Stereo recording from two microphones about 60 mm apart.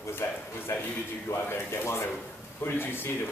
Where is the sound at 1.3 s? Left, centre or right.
Left.